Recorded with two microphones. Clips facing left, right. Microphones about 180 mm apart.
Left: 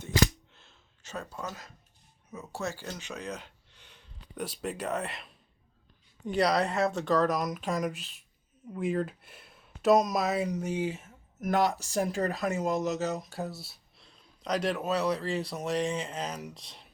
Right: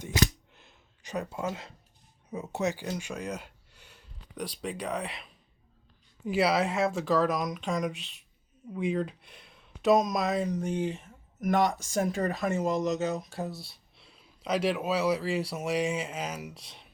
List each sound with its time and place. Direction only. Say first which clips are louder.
0.5 s a sound: right 2 dB; 15° right (ahead or behind)
2.3 s speech: right 5 dB; 25° right (ahead or behind); by 4.1 s 10° right (ahead or behind)
4.4 s speech: even; 5° left (ahead or behind)